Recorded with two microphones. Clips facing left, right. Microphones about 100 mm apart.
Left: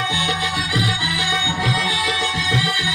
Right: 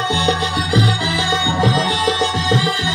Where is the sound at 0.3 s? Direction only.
25° right (ahead or behind).